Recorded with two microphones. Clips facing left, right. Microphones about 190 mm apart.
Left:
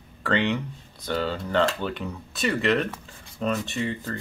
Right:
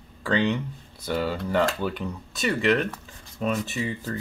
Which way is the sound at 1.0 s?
10° right (ahead or behind).